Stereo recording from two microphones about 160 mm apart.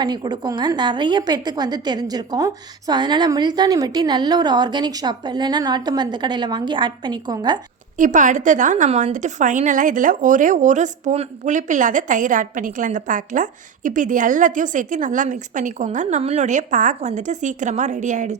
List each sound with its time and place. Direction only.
0.0 s a woman's voice: 25° right (ahead or behind)
7.9 s a woman's voice: 50° right (ahead or behind)